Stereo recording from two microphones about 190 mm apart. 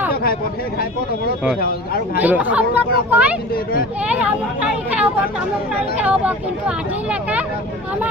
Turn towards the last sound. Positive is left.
turn(degrees=-5)  # may be behind; listen again after turning